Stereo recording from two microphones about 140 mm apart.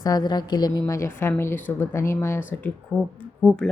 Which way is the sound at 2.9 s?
5° right (ahead or behind).